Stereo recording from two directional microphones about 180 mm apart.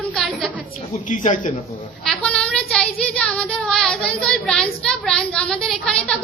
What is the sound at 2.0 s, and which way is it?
Child singing, 5° left (ahead or behind).